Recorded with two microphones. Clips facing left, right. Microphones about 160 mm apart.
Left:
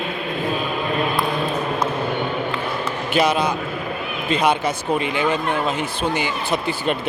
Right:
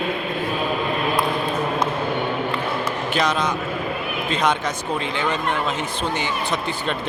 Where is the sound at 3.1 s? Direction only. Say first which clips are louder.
Left 4 dB; 10° left (ahead or behind).